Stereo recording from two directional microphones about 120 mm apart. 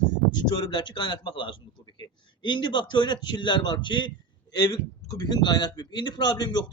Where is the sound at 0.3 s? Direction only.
40° left (ahead or behind).